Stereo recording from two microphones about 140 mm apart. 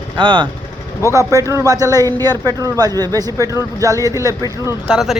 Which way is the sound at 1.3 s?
20° right (ahead or behind).